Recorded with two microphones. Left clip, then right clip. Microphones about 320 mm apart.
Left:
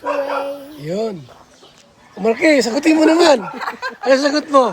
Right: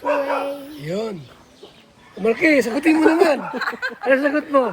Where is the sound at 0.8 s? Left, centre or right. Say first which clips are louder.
Left 5 dB; left.